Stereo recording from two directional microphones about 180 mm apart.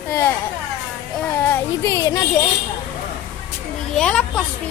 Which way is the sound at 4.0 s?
5° left (ahead or behind).